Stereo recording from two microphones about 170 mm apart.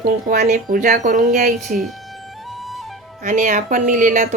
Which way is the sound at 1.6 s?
Centre (ahead or behind).